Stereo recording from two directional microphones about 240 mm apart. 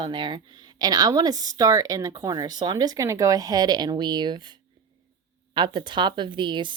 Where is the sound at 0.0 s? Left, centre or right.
Centre.